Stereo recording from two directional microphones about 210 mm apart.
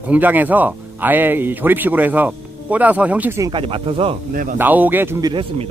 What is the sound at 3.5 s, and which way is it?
Speech, 25° right (ahead or behind).